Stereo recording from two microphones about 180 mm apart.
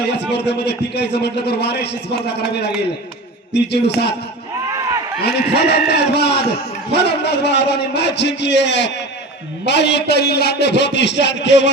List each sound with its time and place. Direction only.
0.0 s a man's voice: 65° left (ahead or behind)
5.2 s a man's voice: 65° left (ahead or behind)